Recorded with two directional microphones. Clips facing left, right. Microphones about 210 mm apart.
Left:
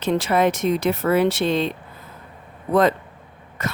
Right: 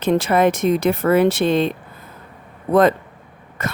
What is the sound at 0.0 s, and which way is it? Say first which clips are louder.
Speech: right 3 dB; 50° right (ahead or behind).